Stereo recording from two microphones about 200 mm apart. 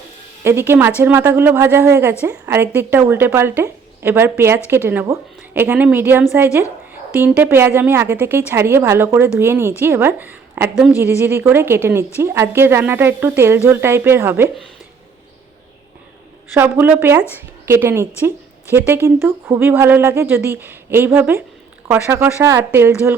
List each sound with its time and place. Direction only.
0.4 s speech: 10° right (ahead or behind)
16.6 s speech: 10° right (ahead or behind)